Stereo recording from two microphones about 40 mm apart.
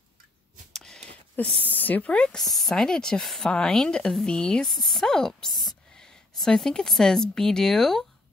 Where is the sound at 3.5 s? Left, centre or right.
Centre.